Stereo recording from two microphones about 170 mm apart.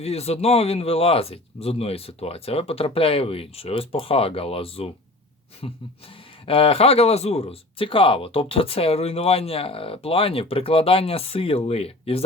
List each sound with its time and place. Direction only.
0.0 s speech: 35° left (ahead or behind)